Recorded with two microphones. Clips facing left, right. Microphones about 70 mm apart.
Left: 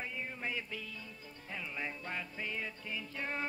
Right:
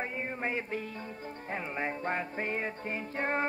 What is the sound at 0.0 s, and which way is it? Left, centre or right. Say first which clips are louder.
Music: right 6 dB; right.